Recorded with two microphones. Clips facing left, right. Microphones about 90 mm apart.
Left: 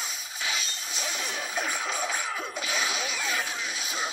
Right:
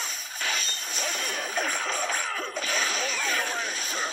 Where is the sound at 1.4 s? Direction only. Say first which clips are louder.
Right 1 dB; 5° left (ahead or behind).